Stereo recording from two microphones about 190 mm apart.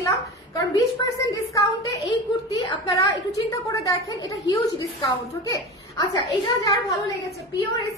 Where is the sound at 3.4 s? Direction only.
20° left (ahead or behind).